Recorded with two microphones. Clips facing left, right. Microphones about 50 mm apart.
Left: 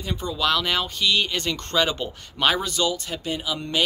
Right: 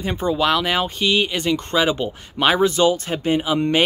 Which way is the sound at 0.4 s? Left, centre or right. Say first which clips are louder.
Right 2 dB; centre.